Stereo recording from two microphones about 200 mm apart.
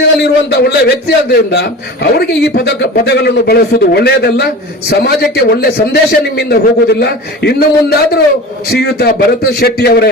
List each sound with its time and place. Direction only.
0.2 s a man's voice: 55° left (ahead or behind)